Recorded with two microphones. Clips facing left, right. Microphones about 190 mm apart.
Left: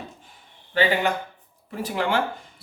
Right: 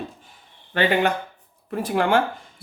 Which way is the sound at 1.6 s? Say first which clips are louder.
Right 4 dB; 55° right (ahead or behind).